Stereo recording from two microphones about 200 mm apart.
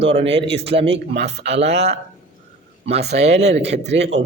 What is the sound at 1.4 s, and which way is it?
Speech, 60° right (ahead or behind).